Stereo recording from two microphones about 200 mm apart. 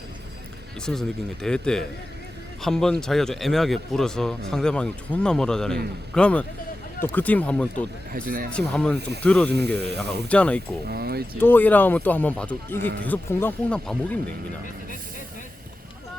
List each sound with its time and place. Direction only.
0.9 s speech: 5° left (ahead or behind)
8.1 s speech: 45° right (ahead or behind)
8.5 s speech: 5° left (ahead or behind)
9.8 s speech: 55° right (ahead or behind)
10.2 s speech: 5° left (ahead or behind)
10.8 s speech: 50° right (ahead or behind)
11.3 s speech: 10° left (ahead or behind)